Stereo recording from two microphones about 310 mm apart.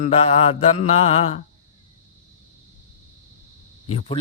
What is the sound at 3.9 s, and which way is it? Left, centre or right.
Speech, left.